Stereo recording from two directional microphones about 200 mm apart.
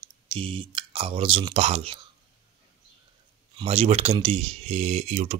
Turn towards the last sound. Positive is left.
turn(degrees=-30)  # may be behind; listen again after turning